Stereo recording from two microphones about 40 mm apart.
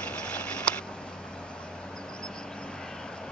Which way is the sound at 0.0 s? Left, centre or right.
Left.